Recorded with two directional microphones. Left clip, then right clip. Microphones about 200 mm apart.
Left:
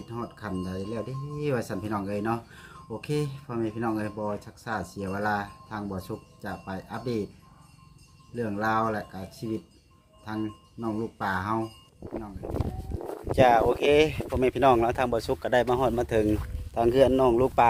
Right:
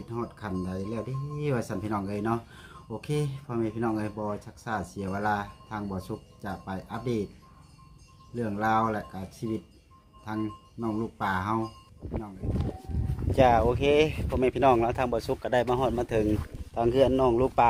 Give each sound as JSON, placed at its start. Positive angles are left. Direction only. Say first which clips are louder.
{"t": 0.1, "sound": "speech", "louder": "right 1 dB", "side_deg": -5}
{"t": 8.4, "sound": "speech", "louder": "even", "side_deg": -5}
{"t": 13.3, "sound": "speech", "louder": "left 2 dB", "side_deg": 5}